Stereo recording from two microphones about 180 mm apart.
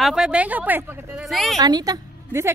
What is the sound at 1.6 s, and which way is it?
Speech, 20° right (ahead or behind).